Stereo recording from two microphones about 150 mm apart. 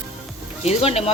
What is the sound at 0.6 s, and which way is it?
Speech, 45° left (ahead or behind).